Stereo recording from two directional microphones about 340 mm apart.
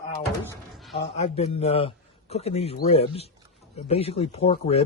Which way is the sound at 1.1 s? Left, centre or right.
Centre.